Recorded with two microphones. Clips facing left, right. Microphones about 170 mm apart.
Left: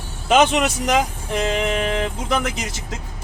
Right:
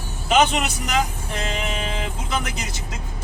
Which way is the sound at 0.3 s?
90° left.